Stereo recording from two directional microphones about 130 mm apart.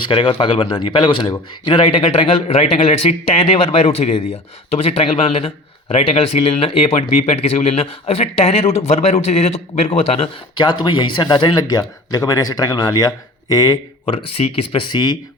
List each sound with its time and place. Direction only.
0.1 s speech: 40° left (ahead or behind)
10.7 s speech: 35° left (ahead or behind)
14.0 s speech: 40° left (ahead or behind)